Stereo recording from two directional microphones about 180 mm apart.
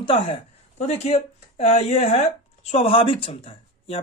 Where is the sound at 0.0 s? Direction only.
30° left (ahead or behind).